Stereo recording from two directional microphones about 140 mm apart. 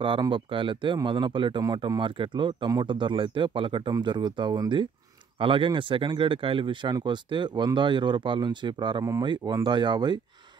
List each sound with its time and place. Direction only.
0.0 s speech: 35° right (ahead or behind)